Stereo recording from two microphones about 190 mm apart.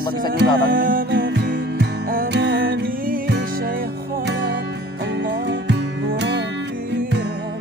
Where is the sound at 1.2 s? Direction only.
65° right (ahead or behind).